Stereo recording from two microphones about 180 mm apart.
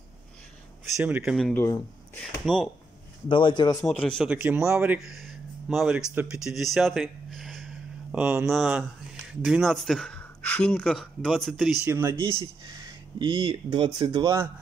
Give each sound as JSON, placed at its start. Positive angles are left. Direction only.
{"t": 0.9, "sound": "speech", "side_deg": -10}
{"t": 1.5, "sound": "speech", "side_deg": 10}
{"t": 2.4, "sound": "speech", "side_deg": 0}
{"t": 3.3, "sound": "a man's voice", "side_deg": 25}
{"t": 3.7, "sound": "speech", "side_deg": 5}
{"t": 4.3, "sound": "speech", "side_deg": -10}
{"t": 11.8, "sound": "speech", "side_deg": -15}
{"t": 12.2, "sound": "speech", "side_deg": -30}